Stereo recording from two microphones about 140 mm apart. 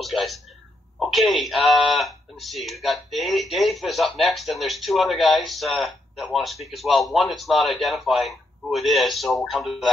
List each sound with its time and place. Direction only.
0.0 s speech: centre (ahead or behind)